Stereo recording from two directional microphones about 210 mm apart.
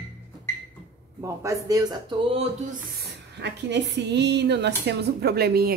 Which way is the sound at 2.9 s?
50° right (ahead or behind).